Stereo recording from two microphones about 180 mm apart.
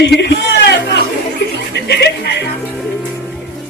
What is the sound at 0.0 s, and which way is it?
Music, 70° left (ahead or behind).